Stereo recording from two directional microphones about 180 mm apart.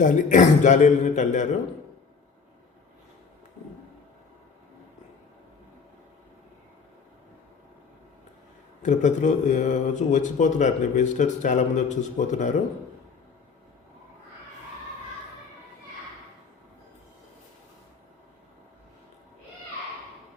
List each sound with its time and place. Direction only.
0.0 s speech: 45° left (ahead or behind)
8.8 s speech: 45° left (ahead or behind)